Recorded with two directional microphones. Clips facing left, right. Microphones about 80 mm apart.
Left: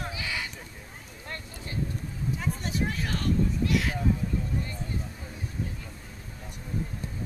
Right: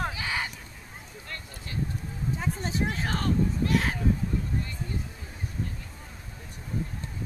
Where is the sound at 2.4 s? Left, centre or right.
Right.